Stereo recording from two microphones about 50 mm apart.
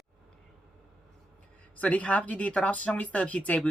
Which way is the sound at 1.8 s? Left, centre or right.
Left.